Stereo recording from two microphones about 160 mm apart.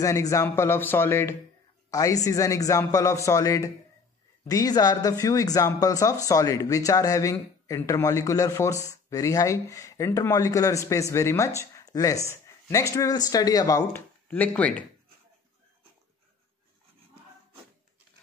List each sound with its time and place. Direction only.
0.0 s speech: 20° left (ahead or behind)
14.2 s speech: 10° left (ahead or behind)